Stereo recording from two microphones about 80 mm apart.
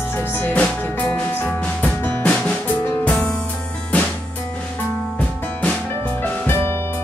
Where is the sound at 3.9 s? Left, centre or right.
Centre.